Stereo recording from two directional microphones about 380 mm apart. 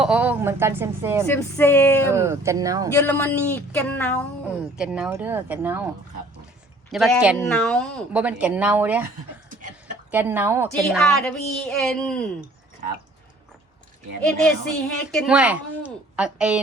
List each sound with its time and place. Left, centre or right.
0.0 s speech: centre
1.3 s speech: centre
2.1 s speech: centre
2.9 s speech: centre
6.9 s speech: centre
9.5 s a sound: centre
10.1 s speech: centre
14.8 s speech: centre